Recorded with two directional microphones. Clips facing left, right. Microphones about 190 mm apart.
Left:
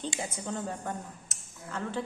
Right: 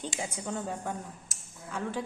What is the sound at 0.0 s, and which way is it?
A woman's voice, 10° right (ahead or behind).